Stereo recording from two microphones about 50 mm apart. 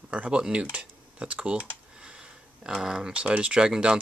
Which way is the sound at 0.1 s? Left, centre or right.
Right.